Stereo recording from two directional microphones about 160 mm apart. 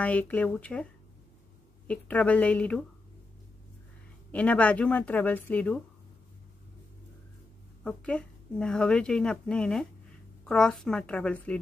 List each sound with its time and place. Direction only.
0.0 s speech: 10° left (ahead or behind)
1.9 s speech: 10° left (ahead or behind)
4.3 s speech: 10° left (ahead or behind)
7.8 s a woman's voice: 5° left (ahead or behind)